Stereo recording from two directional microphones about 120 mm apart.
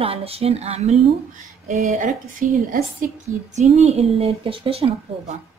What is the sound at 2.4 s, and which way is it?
Speech, 90° right.